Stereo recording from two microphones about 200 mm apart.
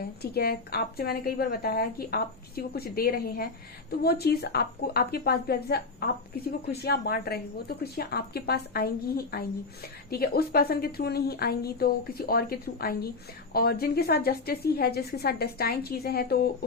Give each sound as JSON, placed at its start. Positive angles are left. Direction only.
{"t": 0.0, "sound": "a woman's voice", "side_deg": 50}